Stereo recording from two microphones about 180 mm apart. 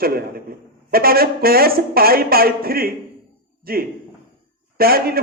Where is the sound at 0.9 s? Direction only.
55° right (ahead or behind).